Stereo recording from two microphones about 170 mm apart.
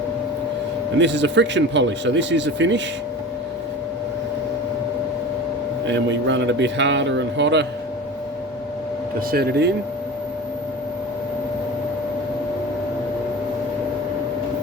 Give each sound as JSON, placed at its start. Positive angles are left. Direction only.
{"t": 0.9, "sound": "speech", "side_deg": -90}
{"t": 5.8, "sound": "speech", "side_deg": -90}
{"t": 9.3, "sound": "speech", "side_deg": -70}